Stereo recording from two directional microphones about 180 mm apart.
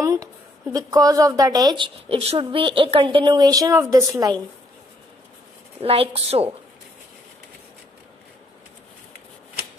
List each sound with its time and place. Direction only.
0.0 s a sound: 20° right (ahead or behind)
0.7 s a woman's voice: 20° right (ahead or behind)
5.8 s a woman's voice: 35° right (ahead or behind)